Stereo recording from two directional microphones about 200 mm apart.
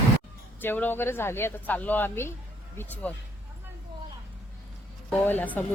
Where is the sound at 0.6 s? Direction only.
10° left (ahead or behind).